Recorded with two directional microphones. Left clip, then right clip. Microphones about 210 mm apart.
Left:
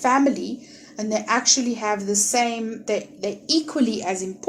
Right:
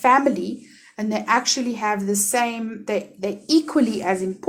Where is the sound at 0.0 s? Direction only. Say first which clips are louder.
Right 3 dB; 40° right (ahead or behind).